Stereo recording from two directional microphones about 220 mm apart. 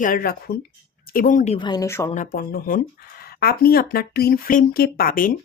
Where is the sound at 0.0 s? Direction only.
40° left (ahead or behind).